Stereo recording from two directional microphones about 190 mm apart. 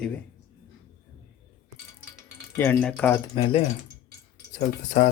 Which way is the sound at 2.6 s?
10° left (ahead or behind).